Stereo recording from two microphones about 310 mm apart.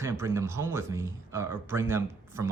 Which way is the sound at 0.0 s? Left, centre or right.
Centre.